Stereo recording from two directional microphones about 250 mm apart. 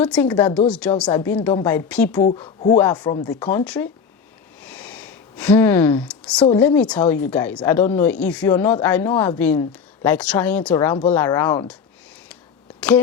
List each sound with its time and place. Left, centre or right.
0.0 s a woman's voice: centre
0.3 s speech: centre
0.7 s a woman's voice: centre
2.2 s speech: left
3.6 s a woman's voice: centre
4.6 s a sound: centre
6.6 s speech: centre